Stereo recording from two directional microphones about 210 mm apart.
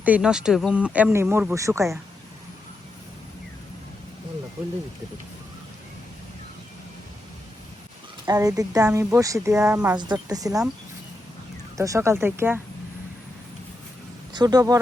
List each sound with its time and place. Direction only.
0.0 s speech: 5° right (ahead or behind)
8.2 s speech: 15° right (ahead or behind)
11.8 s speech: 15° right (ahead or behind)
14.3 s speech: 20° right (ahead or behind)